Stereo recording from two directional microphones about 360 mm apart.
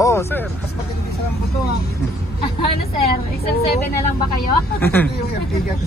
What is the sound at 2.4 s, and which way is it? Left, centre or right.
Vehicle, left.